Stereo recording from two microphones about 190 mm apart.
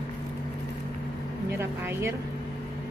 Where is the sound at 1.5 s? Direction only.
10° right (ahead or behind).